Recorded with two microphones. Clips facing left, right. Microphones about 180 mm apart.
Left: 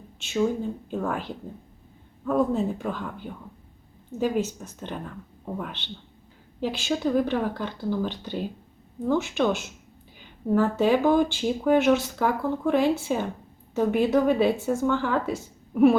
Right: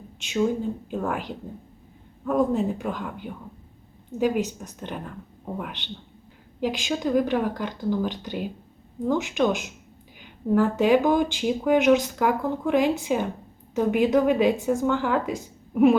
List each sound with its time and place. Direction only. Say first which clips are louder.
0.9 s speech: right 1 dB; 10° right (ahead or behind)